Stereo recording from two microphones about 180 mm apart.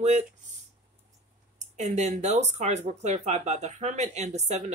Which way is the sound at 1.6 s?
40° right (ahead or behind).